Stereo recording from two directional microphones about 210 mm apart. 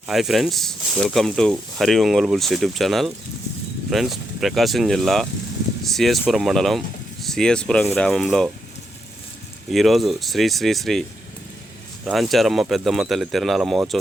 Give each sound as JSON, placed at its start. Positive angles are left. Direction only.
{"t": 0.1, "sound": "speech", "side_deg": 0}
{"t": 9.6, "sound": "speech", "side_deg": 0}
{"t": 12.0, "sound": "speech", "side_deg": 0}